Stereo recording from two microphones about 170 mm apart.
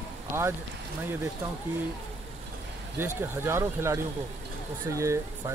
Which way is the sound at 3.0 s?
10° right (ahead or behind).